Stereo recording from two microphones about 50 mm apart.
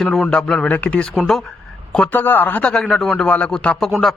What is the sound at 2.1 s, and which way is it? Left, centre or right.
Speech, left.